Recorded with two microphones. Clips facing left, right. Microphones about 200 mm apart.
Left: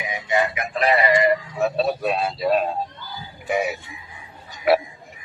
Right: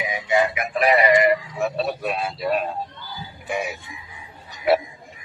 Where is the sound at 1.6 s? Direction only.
Centre (ahead or behind).